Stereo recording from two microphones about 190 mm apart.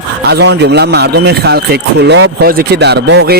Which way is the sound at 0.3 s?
60° right (ahead or behind).